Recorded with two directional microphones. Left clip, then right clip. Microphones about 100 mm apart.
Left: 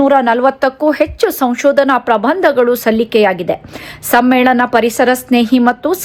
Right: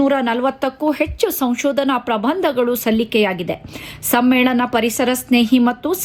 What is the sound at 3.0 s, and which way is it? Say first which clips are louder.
A woman's voice: left 6 dB; 45° left (ahead or behind).